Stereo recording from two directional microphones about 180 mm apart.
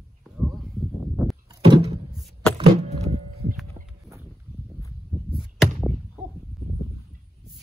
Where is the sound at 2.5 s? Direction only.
35° right (ahead or behind).